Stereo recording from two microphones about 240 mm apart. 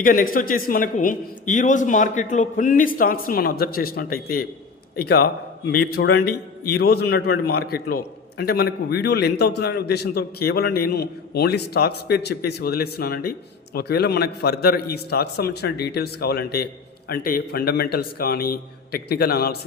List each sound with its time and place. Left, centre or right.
0.0 s a man's voice: left